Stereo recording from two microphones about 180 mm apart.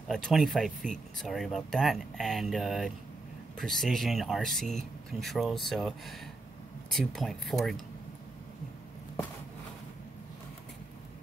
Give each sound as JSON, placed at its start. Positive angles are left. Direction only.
{"t": 0.1, "sound": "speech", "side_deg": 0}